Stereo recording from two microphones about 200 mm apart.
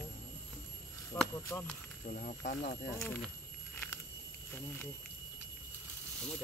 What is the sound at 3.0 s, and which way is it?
Speech, centre (ahead or behind).